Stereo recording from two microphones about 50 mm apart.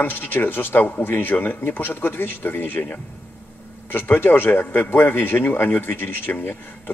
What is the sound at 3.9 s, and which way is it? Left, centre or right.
A man's voice, left.